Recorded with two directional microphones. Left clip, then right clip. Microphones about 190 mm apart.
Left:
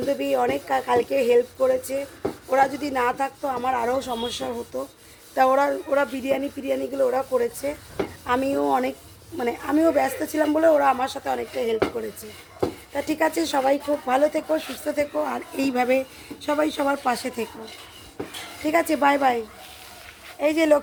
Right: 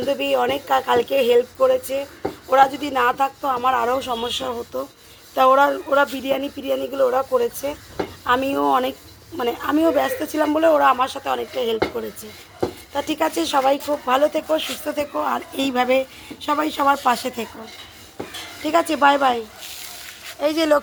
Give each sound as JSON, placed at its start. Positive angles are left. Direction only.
{"t": 0.0, "sound": "speech", "side_deg": -5}
{"t": 18.6, "sound": "speech", "side_deg": 0}